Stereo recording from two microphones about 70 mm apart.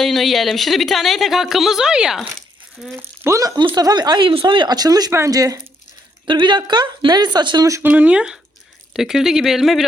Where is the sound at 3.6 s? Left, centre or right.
Right.